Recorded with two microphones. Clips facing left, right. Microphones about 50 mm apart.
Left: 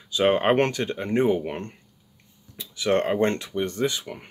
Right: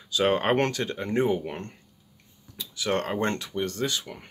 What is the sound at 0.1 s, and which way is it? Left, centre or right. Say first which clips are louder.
Speech: left 3 dB; centre.